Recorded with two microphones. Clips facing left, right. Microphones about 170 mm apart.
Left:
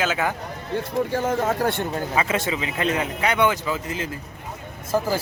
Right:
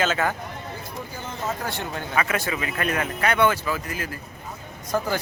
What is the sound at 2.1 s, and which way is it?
Speech, 25° left (ahead or behind).